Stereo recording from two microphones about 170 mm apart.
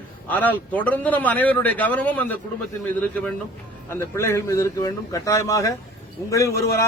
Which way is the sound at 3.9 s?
15° left (ahead or behind).